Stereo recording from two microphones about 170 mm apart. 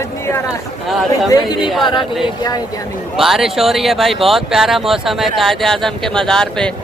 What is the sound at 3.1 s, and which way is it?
Speech, centre (ahead or behind).